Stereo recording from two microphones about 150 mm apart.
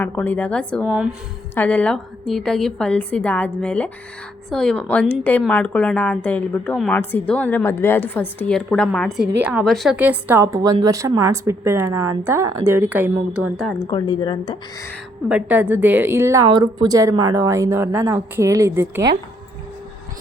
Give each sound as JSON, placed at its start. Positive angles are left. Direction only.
{"t": 0.0, "sound": "a woman's voice", "side_deg": 10}
{"t": 0.9, "sound": "a woman's voice", "side_deg": -5}
{"t": 1.5, "sound": "a woman's voice", "side_deg": 10}
{"t": 10.0, "sound": "a woman's voice", "side_deg": -10}
{"t": 13.8, "sound": "speech", "side_deg": 30}
{"t": 15.3, "sound": "a woman's voice", "side_deg": -10}
{"t": 16.5, "sound": "a woman's voice", "side_deg": -30}